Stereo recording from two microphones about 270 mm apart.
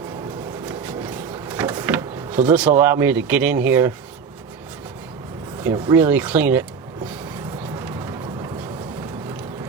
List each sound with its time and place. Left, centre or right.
0.6 s drawer open or close: centre
5.6 s speech: centre
7.8 s vehicle: centre